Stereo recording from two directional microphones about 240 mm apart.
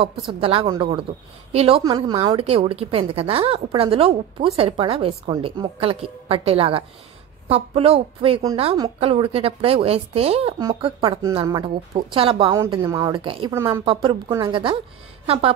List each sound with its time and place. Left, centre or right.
0.0 s a woman's voice: right